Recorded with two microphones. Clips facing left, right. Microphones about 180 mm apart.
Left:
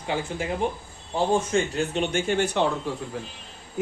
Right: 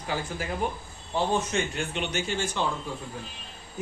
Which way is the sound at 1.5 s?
40° left (ahead or behind).